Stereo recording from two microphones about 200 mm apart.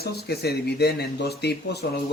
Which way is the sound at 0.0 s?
50° left (ahead or behind).